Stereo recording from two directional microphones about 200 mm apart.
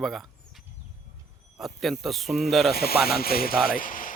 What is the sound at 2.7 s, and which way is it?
Speech, 50° left (ahead or behind).